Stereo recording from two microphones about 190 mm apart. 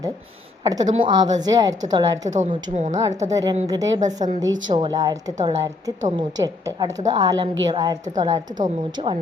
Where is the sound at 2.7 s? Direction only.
40° right (ahead or behind).